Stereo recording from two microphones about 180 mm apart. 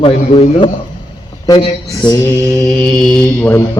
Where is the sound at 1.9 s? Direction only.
20° left (ahead or behind).